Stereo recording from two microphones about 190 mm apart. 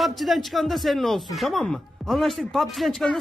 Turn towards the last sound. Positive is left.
turn(degrees=0)  # may be behind; listen again after turning